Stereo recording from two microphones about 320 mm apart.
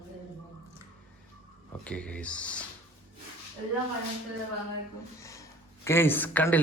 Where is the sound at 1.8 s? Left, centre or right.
Centre.